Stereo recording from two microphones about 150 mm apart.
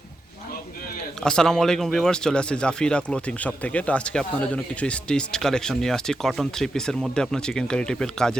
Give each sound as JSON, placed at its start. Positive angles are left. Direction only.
{"t": 1.2, "sound": "speech", "side_deg": 5}